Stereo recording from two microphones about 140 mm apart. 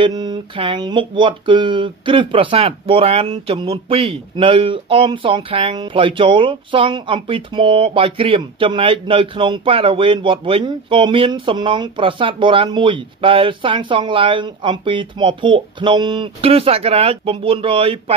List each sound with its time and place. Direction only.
0.0 s speech: 30° right (ahead or behind)